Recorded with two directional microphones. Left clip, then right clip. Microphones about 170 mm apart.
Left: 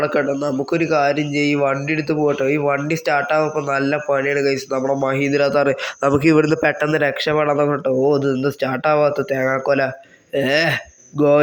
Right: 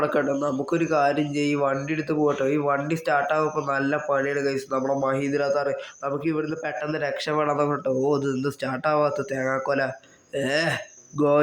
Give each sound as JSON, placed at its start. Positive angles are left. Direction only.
{"t": 0.0, "sound": "speech", "side_deg": 15}
{"t": 6.1, "sound": "a man's voice", "side_deg": 40}
{"t": 6.8, "sound": "speech", "side_deg": 25}